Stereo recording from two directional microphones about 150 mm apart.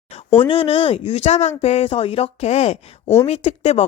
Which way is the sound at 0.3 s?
35° left (ahead or behind).